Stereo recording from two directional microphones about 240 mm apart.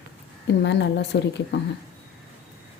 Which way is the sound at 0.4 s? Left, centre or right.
Left.